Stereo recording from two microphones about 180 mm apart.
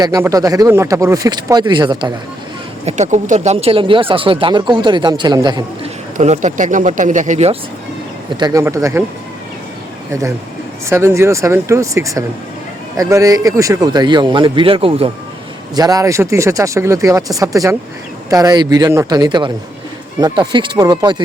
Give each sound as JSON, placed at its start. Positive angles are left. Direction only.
{"t": 0.0, "sound": "speech", "side_deg": -20}
{"t": 2.8, "sound": "speech", "side_deg": -40}
{"t": 6.1, "sound": "speech", "side_deg": -40}
{"t": 8.4, "sound": "speech", "side_deg": -20}
{"t": 10.1, "sound": "speech", "side_deg": -15}
{"t": 15.7, "sound": "speech", "side_deg": -20}